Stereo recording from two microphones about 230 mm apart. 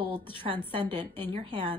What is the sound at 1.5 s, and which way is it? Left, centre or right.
Speech, right.